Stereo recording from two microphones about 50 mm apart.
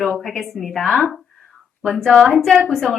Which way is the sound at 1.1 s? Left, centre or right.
Centre.